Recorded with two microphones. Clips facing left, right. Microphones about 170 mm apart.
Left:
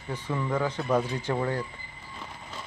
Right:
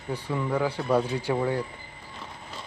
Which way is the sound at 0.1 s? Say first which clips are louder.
Right 2 dB; 10° right (ahead or behind).